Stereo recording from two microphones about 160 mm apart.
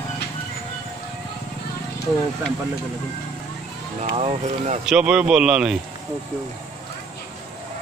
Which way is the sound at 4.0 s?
40° right (ahead or behind).